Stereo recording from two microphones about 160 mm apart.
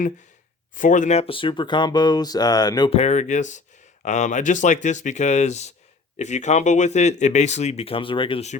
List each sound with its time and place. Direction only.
0.8 s speech: 55° left (ahead or behind); by 2.9 s 25° left (ahead or behind)
2.9 s speech: 45° left (ahead or behind)